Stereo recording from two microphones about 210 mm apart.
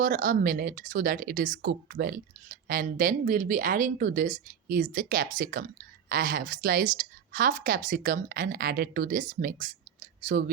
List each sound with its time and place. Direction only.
0.0 s speech: 40° right (ahead or behind)